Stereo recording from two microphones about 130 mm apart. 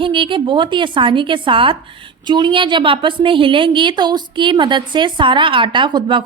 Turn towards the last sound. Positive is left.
turn(degrees=-40)  # may be behind; listen again after turning